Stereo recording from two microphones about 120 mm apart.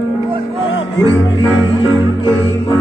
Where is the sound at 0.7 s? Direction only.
50° left (ahead or behind).